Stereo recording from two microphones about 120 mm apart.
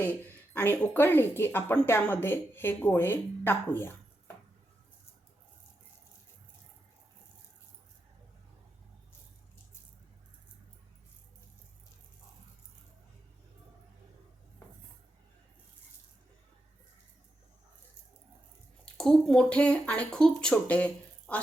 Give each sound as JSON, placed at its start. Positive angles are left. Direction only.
{"t": 0.5, "sound": "a woman's voice", "side_deg": 15}
{"t": 18.9, "sound": "a woman's voice", "side_deg": 5}